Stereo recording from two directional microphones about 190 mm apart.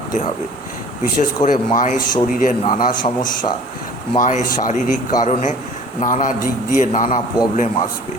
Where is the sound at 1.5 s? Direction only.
40° left (ahead or behind).